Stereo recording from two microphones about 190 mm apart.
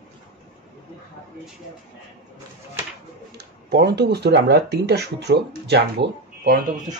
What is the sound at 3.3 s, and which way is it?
Speech, 60° right (ahead or behind).